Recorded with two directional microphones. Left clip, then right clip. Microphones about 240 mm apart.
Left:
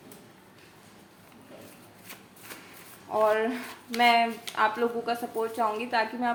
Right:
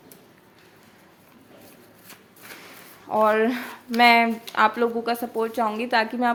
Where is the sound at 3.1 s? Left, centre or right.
Right.